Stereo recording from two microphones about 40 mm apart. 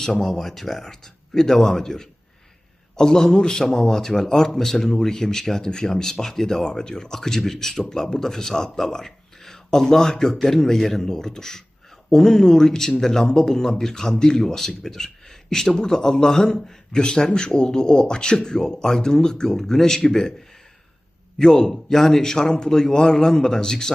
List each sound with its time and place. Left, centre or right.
0.0 s speech: centre
21.3 s speech: centre